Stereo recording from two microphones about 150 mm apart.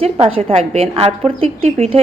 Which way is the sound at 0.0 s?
40° right (ahead or behind).